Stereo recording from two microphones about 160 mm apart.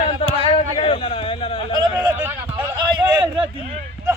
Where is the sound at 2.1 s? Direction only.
15° right (ahead or behind).